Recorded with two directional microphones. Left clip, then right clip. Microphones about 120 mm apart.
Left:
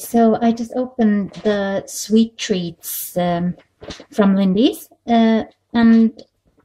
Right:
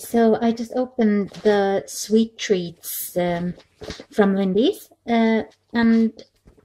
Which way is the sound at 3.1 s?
30° right (ahead or behind).